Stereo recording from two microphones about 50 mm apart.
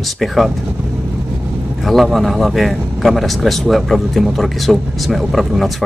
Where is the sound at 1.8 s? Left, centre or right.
Centre.